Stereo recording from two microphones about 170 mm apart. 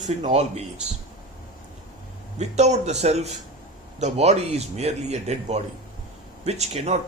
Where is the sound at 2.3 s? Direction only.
40° right (ahead or behind).